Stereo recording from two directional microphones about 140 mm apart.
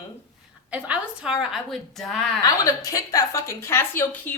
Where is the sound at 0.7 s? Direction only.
10° right (ahead or behind).